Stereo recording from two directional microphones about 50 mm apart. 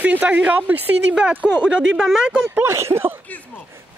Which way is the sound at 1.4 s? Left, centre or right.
Right.